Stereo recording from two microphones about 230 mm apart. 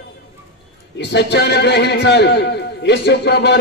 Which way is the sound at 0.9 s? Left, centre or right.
Left.